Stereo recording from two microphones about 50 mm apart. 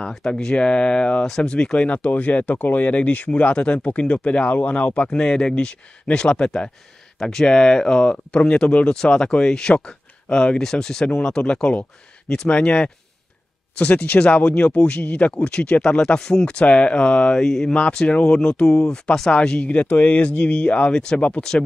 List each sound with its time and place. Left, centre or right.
0.0 s speech: centre; by 5.1 s left
5.1 s speech: centre
17.7 s speech: left
19.7 s speech: left
21.4 s speech: centre